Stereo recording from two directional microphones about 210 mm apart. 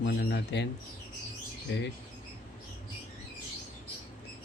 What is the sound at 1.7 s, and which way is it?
Speech, 60° left (ahead or behind).